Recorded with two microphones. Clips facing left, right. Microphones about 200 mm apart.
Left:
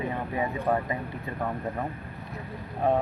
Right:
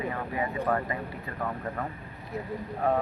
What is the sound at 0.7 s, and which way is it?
Speech, 15° left (ahead or behind).